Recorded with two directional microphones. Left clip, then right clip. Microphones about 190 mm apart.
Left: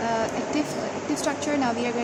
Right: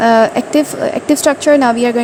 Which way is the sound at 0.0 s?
45° right (ahead or behind).